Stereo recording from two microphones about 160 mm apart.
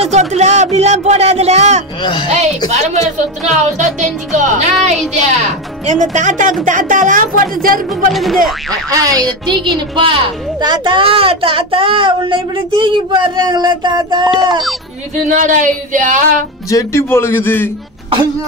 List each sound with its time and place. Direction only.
0.0 s speech: 45° right (ahead or behind)
2.0 s speech: 30° left (ahead or behind)
2.7 s speech: 45° right (ahead or behind); by 7.8 s 60° right (ahead or behind)
8.1 s speech: centre (ahead or behind)
8.9 s a woman's voice: 20° right (ahead or behind)
15.2 s speech: 50° right (ahead or behind)
16.6 s a man's voice: 20° left (ahead or behind)